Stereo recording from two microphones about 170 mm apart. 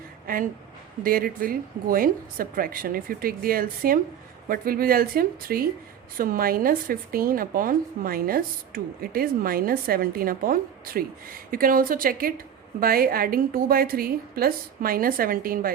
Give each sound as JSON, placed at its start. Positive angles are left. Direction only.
{"t": 1.0, "sound": "a woman's voice", "side_deg": -60}